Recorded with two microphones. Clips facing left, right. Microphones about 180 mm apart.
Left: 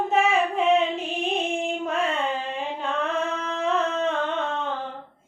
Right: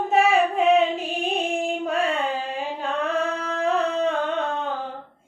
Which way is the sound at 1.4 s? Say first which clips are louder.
Right 2 dB; 35° right (ahead or behind).